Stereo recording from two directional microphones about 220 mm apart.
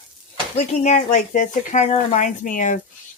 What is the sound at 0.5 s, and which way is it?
Speech, 30° left (ahead or behind).